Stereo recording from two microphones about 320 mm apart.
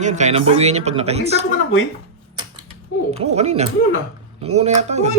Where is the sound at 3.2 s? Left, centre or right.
Centre.